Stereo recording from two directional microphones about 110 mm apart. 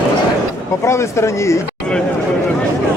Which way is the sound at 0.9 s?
25° left (ahead or behind).